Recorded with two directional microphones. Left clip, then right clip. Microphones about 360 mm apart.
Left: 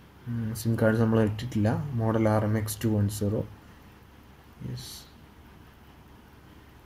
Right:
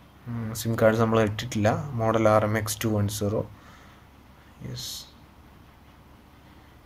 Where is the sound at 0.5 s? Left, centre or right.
Right.